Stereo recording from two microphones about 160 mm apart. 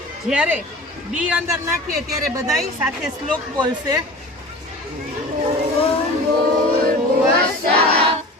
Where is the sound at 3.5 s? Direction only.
25° right (ahead or behind).